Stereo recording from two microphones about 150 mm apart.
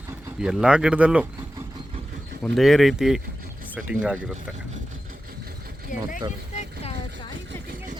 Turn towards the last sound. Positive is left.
turn(degrees=45)  # may be behind; listen again after turning